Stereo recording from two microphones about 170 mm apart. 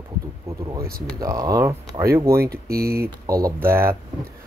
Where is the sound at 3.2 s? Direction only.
20° right (ahead or behind).